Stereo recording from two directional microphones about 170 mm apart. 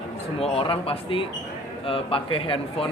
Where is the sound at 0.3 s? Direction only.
35° left (ahead or behind).